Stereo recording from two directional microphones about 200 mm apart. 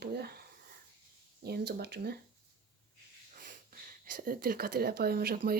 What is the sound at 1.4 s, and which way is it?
Speech, 55° right (ahead or behind).